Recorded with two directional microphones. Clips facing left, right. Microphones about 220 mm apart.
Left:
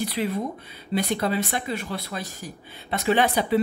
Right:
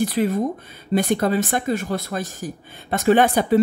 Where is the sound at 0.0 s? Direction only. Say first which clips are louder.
Right 6 dB; 45° right (ahead or behind).